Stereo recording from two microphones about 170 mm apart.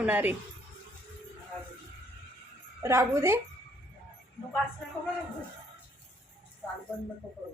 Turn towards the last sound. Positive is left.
turn(degrees=10)  # may be behind; listen again after turning